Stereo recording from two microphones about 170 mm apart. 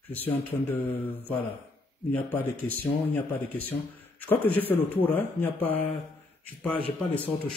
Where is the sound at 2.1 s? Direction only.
10° left (ahead or behind).